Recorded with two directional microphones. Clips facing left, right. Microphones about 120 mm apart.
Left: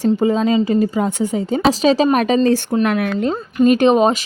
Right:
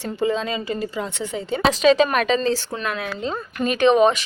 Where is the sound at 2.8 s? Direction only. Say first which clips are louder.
Left 10 dB; 70° left (ahead or behind).